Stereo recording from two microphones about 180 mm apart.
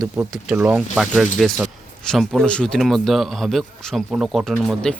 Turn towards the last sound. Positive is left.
turn(degrees=0)  # may be behind; listen again after turning